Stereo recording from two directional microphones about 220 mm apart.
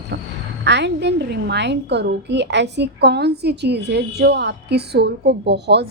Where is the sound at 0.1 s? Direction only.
50° right (ahead or behind).